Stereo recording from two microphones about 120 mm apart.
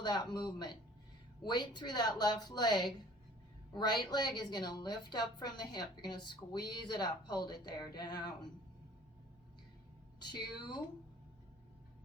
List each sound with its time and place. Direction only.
0.0 s a woman's voice: 35° left (ahead or behind)
10.2 s a woman's voice: 40° left (ahead or behind)